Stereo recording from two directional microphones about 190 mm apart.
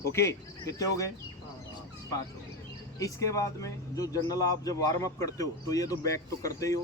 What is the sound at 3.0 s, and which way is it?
Speech, 15° left (ahead or behind).